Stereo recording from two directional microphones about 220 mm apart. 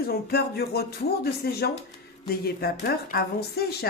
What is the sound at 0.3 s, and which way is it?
Speech, 45° left (ahead or behind).